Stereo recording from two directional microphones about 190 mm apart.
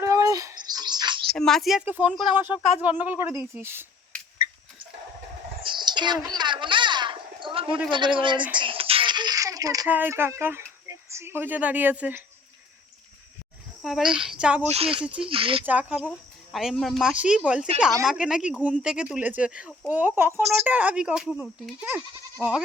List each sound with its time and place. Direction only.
0.0 s bird: 15° right (ahead or behind)
1.4 s speech: centre (ahead or behind)
5.6 s a sound: 25° right (ahead or behind)
7.9 s speech: 25° right (ahead or behind); by 12.2 s 10° right (ahead or behind)
13.8 s speech: 5° right (ahead or behind)
14.7 s speech: 30° right (ahead or behind)
15.6 s speech: 10° right (ahead or behind)